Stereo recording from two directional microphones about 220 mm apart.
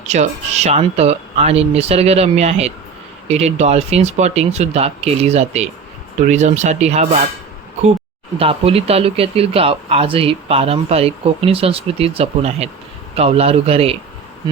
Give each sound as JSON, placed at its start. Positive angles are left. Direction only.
{"t": 0.1, "sound": "speech", "side_deg": -30}
{"t": 8.4, "sound": "speech", "side_deg": -25}